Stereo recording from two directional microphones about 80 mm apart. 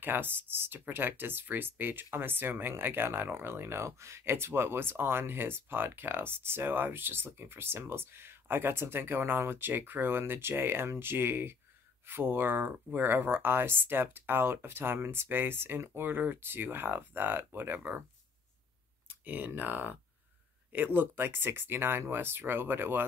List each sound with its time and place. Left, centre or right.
0.0 s speech: right
19.0 s speech: right